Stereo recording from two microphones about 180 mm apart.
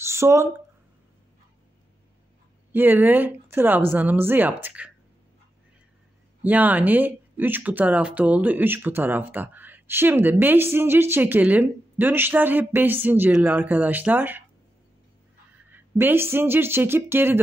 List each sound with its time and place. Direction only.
0.0 s a sound: 15° right (ahead or behind)
2.7 s speech: 10° right (ahead or behind)
6.4 s speech: 10° right (ahead or behind)
15.7 s speech: 10° right (ahead or behind)